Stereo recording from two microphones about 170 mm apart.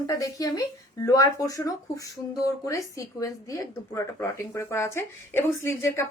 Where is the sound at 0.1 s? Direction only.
20° left (ahead or behind).